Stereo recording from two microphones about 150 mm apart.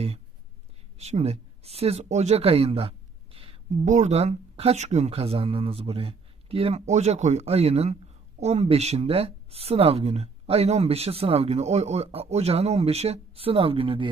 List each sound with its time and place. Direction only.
0.9 s speech: 45° right (ahead or behind)